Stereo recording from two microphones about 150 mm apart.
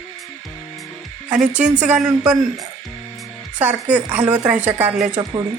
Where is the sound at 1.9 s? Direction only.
5° right (ahead or behind).